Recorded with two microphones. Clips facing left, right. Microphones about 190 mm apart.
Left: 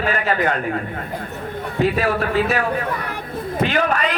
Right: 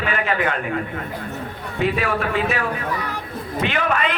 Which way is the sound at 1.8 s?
35° left (ahead or behind).